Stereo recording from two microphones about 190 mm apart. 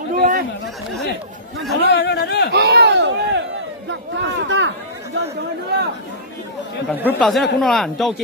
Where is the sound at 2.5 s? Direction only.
60° right (ahead or behind).